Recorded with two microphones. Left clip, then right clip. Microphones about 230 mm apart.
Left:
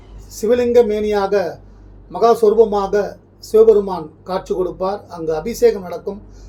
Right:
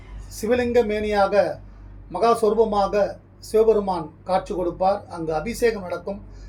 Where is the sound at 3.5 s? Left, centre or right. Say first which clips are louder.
Left 7 dB; centre.